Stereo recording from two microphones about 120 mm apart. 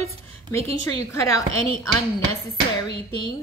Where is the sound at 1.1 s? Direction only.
25° left (ahead or behind).